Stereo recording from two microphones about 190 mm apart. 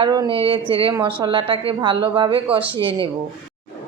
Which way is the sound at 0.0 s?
25° right (ahead or behind).